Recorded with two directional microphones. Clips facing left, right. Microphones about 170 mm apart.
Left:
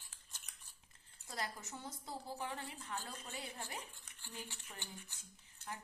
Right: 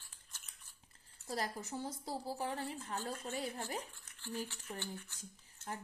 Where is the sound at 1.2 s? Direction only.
35° right (ahead or behind).